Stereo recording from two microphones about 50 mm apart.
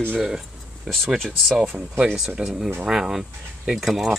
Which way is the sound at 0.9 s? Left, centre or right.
Centre.